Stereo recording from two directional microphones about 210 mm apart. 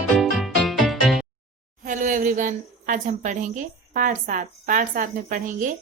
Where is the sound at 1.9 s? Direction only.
35° right (ahead or behind).